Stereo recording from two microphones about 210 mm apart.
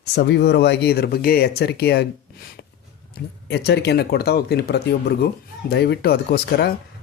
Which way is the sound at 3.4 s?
50° left (ahead or behind).